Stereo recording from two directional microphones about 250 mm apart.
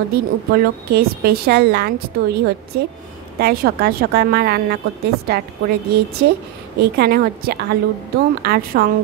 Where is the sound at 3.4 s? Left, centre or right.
Right.